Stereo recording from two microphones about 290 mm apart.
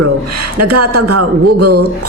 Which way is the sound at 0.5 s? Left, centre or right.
Right.